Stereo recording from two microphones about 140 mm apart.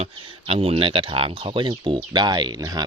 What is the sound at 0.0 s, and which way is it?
Speech, 45° right (ahead or behind).